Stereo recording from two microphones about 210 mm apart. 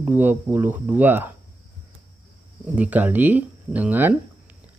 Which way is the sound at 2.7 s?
10° right (ahead or behind).